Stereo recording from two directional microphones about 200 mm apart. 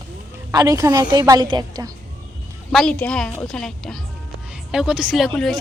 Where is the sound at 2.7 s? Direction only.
5° left (ahead or behind).